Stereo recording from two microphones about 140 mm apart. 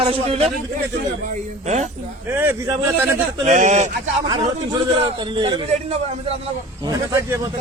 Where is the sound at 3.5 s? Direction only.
60° right (ahead or behind).